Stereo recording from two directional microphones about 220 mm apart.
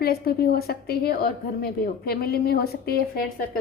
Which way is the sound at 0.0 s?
45° left (ahead or behind).